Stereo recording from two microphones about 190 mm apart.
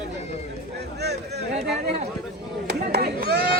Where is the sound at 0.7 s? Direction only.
60° right (ahead or behind).